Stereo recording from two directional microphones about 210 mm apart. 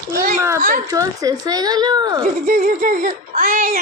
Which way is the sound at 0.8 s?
15° right (ahead or behind).